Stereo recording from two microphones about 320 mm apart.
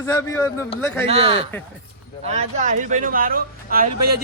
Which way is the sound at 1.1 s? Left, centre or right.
Centre.